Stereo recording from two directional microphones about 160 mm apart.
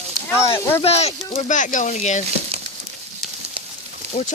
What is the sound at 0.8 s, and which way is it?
Speech, 40° left (ahead or behind).